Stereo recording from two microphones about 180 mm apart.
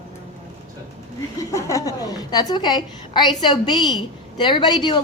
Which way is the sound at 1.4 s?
15° left (ahead or behind).